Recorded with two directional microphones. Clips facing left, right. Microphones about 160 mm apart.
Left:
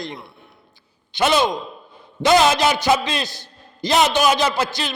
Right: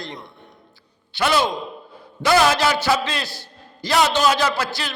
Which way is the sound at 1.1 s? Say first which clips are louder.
Left 2 dB; 20° left (ahead or behind).